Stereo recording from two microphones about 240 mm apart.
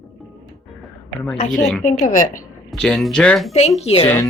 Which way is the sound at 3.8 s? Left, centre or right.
Left.